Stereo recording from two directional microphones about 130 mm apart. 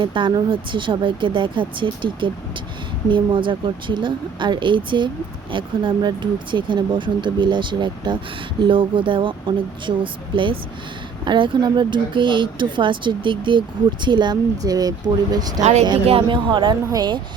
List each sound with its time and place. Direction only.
0.0 s speech: 40° right (ahead or behind)
16.0 s speech: 40° right (ahead or behind)